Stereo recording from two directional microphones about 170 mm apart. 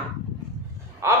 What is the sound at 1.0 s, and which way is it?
Gasp, 15° right (ahead or behind).